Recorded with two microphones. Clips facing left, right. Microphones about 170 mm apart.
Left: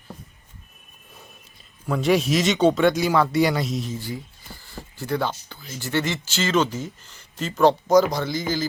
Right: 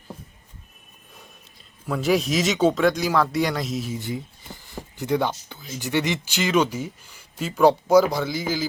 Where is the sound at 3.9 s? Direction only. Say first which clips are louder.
Right 2 dB; 20° right (ahead or behind).